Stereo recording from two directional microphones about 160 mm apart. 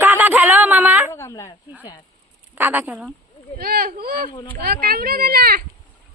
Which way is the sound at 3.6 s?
70° right (ahead or behind).